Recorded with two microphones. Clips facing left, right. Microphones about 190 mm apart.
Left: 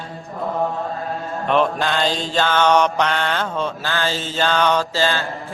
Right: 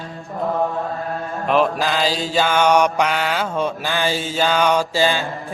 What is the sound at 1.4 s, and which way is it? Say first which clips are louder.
Mantra: right 1 dB; 5° right (ahead or behind).